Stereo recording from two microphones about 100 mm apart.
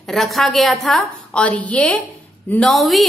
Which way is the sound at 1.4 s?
15° left (ahead or behind).